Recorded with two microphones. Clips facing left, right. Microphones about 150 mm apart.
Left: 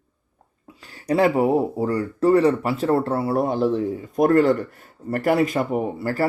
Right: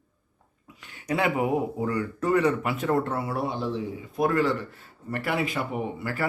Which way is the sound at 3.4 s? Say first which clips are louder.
Left 8 dB; 50° left (ahead or behind).